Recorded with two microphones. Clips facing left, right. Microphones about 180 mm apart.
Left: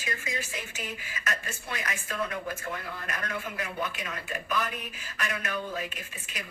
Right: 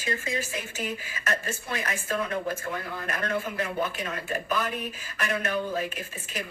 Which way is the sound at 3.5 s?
35° right (ahead or behind).